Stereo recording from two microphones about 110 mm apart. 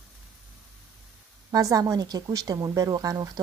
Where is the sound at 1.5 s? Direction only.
30° right (ahead or behind).